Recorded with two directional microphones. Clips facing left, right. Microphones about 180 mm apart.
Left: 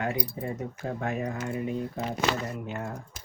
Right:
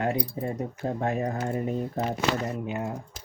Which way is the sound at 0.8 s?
35° right (ahead or behind).